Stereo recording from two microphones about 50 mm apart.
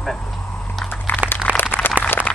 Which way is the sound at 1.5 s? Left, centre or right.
Right.